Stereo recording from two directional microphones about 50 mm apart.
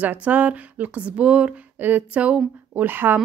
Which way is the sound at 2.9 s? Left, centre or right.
Right.